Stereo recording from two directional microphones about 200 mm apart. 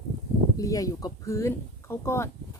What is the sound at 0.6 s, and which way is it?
Speech, 15° left (ahead or behind).